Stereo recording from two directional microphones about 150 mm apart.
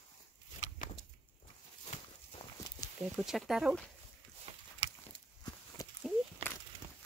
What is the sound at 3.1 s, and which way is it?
Speech, centre (ahead or behind).